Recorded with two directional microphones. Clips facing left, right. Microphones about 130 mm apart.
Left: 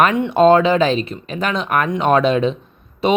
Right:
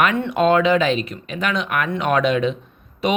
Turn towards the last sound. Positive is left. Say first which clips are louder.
# left 4 dB
turn(degrees=30)  # may be behind; listen again after turning